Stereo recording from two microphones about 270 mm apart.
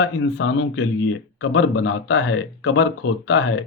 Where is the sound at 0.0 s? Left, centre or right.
Left.